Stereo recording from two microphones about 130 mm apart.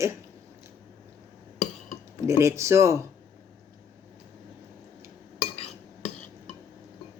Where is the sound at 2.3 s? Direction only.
20° right (ahead or behind).